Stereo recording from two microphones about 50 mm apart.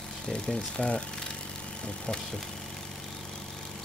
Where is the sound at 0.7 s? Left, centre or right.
Centre.